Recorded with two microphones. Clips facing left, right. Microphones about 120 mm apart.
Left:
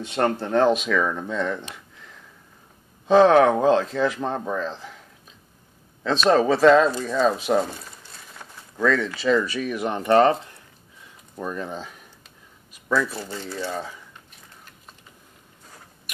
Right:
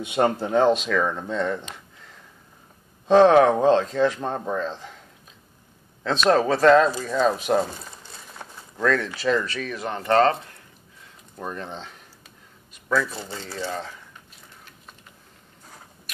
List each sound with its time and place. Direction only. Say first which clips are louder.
0.0 s speech: right 1 dB; 10° right (ahead or behind)
6.0 s speech: left 1 dB; centre (ahead or behind)
8.8 s speech: left 1 dB; centre (ahead or behind)
9.4 s speech: left 4 dB; 10° left (ahead or behind)
11.3 s speech: left 3 dB; 5° left (ahead or behind)
12.7 s a sound: left 1 dB; 5° left (ahead or behind)
13.1 s speech: left 2 dB; 20° right (ahead or behind)
13.6 s speech: even; 5° left (ahead or behind)